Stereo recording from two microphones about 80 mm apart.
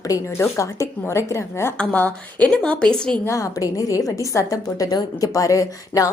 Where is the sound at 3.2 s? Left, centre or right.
Left.